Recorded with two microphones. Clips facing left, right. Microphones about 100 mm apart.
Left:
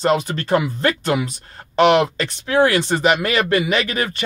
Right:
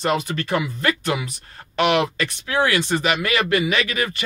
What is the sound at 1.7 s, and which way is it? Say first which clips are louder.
Speech: left 5 dB; 30° left (ahead or behind).